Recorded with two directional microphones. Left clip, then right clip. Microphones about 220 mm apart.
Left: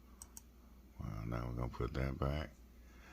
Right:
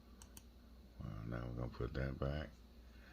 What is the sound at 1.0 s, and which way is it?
Speech, 30° left (ahead or behind).